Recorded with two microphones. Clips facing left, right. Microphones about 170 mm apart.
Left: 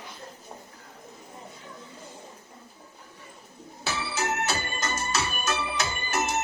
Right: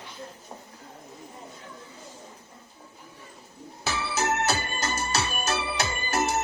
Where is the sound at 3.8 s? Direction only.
40° right (ahead or behind).